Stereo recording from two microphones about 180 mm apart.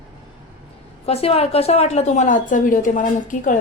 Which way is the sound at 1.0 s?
35° left (ahead or behind).